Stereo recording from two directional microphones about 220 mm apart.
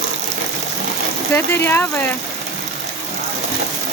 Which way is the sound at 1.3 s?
10° left (ahead or behind).